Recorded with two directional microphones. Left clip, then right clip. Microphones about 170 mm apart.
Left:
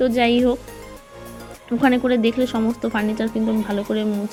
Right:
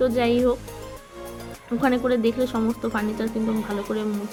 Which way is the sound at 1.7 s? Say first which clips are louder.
Left 4 dB; 20° left (ahead or behind).